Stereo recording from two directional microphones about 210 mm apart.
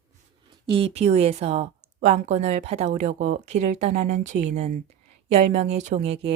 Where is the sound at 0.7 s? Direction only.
25° right (ahead or behind).